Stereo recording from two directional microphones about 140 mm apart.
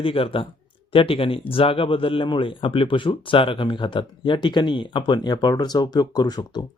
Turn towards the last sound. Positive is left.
turn(degrees=30)  # may be behind; listen again after turning